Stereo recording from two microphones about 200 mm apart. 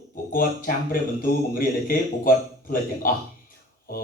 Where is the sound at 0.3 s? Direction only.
45° left (ahead or behind).